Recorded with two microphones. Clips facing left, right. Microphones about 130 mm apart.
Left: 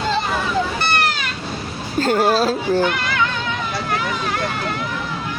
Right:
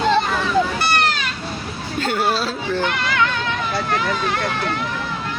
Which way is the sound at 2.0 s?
40° left (ahead or behind).